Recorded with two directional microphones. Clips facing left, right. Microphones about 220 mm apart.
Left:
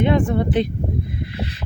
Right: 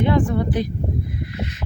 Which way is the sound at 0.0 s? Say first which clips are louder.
Left 1 dB; 25° left (ahead or behind).